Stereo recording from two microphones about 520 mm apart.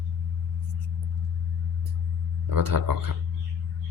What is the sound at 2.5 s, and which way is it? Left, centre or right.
Speech, right.